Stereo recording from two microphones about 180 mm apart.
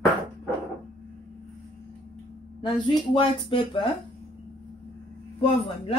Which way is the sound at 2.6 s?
25° left (ahead or behind).